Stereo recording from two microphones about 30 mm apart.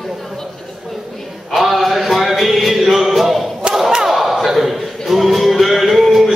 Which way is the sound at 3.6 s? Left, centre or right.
Right.